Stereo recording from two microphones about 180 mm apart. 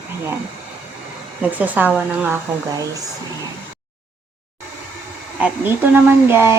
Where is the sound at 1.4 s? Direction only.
10° right (ahead or behind).